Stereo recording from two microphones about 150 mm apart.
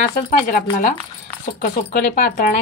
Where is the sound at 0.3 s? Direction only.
65° left (ahead or behind).